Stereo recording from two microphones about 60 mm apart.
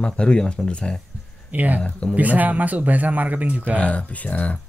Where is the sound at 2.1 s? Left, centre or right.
Right.